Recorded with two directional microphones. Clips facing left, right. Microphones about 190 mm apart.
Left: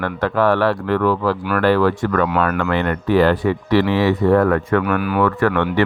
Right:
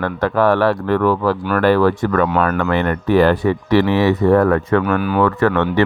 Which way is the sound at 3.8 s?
20° right (ahead or behind).